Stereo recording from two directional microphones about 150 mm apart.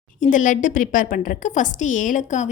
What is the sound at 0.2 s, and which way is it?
A woman's voice, 60° left (ahead or behind).